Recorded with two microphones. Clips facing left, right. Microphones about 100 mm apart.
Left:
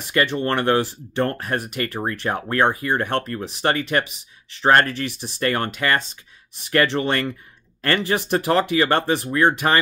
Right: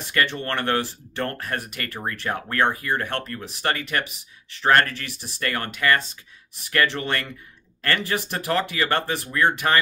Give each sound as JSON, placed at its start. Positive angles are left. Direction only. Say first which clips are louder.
{"t": 0.1, "sound": "speech", "louder": "left 4 dB", "side_deg": 15}